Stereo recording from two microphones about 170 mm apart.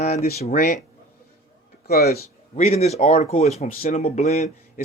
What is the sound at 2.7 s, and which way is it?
Speech, 40° left (ahead or behind).